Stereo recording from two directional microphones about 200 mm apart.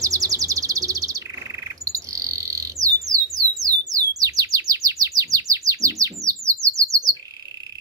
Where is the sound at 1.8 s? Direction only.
15° right (ahead or behind).